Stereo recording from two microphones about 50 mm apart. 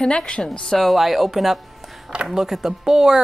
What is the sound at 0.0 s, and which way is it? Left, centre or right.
Speech, centre.